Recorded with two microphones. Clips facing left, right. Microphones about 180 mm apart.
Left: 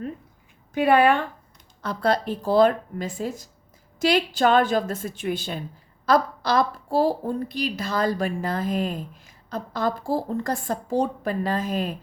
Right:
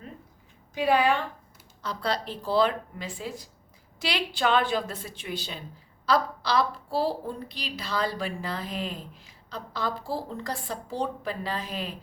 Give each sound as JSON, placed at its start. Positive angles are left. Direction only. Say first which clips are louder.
{"t": 0.7, "sound": "a woman's voice", "louder": "left 5 dB", "side_deg": 55}